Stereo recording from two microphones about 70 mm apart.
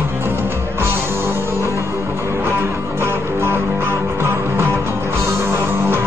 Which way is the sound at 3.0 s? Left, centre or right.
Right.